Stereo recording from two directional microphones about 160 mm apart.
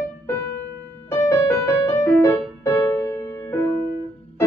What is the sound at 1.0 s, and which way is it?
Music, 20° left (ahead or behind).